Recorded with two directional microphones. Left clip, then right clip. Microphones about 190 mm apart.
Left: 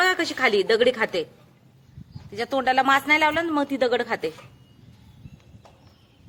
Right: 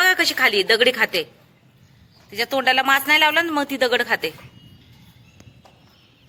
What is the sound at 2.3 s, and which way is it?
A man's voice, 5° left (ahead or behind).